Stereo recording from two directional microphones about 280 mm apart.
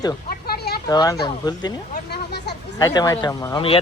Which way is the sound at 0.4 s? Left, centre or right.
Left.